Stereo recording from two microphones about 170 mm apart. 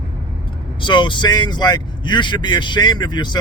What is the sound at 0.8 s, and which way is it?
Speech, 25° left (ahead or behind).